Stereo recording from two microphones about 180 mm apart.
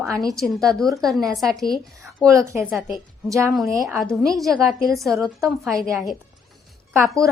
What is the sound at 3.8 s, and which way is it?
Speech, centre (ahead or behind).